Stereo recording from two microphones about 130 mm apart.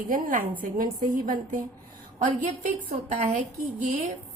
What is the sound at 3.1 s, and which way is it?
Speech, 80° right.